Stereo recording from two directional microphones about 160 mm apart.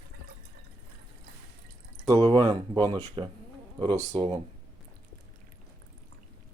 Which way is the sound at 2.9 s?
35° right (ahead or behind).